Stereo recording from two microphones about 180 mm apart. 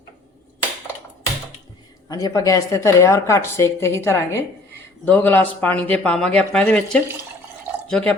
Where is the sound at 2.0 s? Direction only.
20° left (ahead or behind); by 8.2 s 5° left (ahead or behind).